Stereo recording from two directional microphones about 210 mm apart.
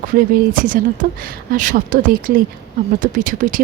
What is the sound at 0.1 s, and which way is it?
Speech, 40° right (ahead or behind).